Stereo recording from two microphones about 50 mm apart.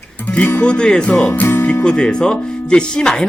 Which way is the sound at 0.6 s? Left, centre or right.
Left.